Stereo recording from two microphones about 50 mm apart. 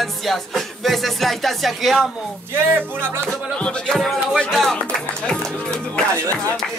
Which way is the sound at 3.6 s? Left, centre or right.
Centre.